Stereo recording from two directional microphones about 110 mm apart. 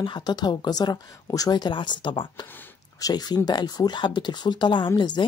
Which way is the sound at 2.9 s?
35° left (ahead or behind).